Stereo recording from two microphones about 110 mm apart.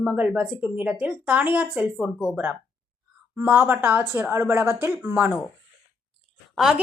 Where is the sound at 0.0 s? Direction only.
10° right (ahead or behind).